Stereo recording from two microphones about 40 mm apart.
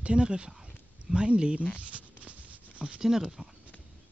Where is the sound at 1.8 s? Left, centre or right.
Right.